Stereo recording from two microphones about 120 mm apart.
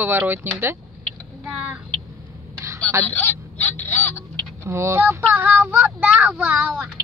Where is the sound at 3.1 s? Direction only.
15° left (ahead or behind).